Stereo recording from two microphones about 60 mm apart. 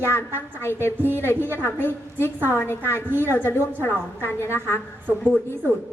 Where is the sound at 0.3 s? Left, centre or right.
Left.